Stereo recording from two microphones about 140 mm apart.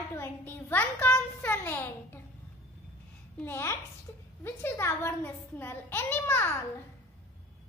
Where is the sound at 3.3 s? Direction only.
15° left (ahead or behind).